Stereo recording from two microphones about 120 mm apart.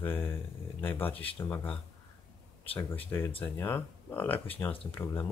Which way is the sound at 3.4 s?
15° left (ahead or behind).